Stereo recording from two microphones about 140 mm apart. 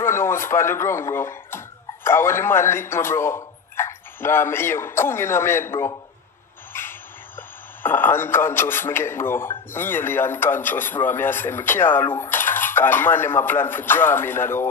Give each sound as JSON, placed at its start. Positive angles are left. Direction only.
{"t": 0.0, "sound": "a man's voice", "side_deg": 15}